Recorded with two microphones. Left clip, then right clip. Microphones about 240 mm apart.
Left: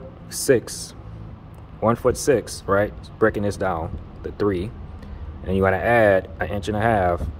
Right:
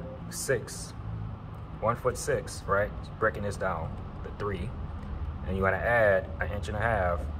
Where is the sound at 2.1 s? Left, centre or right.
Left.